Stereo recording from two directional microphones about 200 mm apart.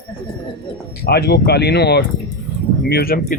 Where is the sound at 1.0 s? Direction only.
55° left (ahead or behind).